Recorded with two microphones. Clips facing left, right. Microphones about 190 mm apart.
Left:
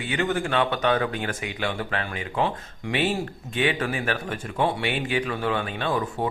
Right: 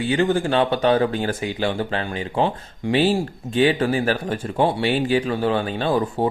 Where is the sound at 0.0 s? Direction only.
30° right (ahead or behind).